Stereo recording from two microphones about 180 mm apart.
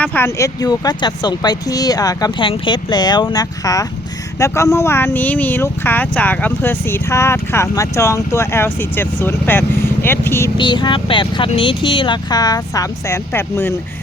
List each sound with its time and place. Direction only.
0.0 s speech: 10° left (ahead or behind)
10.6 s speech: 25° left (ahead or behind)